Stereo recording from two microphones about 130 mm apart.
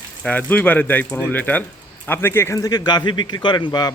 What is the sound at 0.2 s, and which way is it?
A man's voice, 10° left (ahead or behind).